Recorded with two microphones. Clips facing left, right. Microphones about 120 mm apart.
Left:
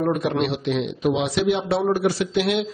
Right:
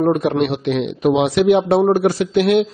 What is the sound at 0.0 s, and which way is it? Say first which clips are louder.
A man's voice: right 5 dB; 40° right (ahead or behind).